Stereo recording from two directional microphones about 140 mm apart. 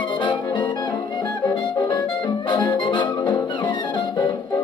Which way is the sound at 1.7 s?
30° left (ahead or behind).